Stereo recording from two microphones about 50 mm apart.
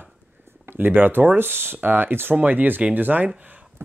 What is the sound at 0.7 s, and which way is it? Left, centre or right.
Speech, right.